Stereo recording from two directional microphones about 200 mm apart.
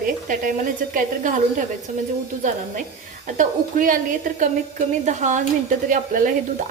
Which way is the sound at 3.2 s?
40° right (ahead or behind).